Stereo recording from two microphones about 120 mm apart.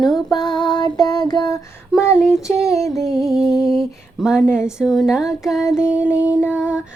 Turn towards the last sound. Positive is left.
turn(degrees=-10)  # may be behind; listen again after turning